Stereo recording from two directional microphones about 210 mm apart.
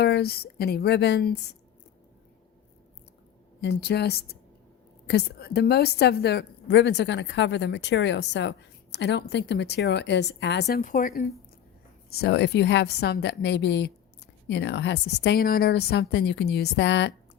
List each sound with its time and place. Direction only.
0.0 s a woman's voice: 50° left (ahead or behind)
3.6 s a woman's voice: 55° left (ahead or behind)
12.1 s a woman's voice: 50° left (ahead or behind)